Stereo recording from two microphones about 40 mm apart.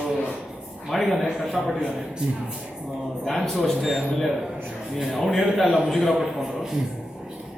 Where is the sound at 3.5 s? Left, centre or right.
Centre.